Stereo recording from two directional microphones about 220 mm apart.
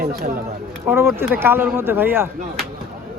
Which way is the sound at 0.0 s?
45° right (ahead or behind).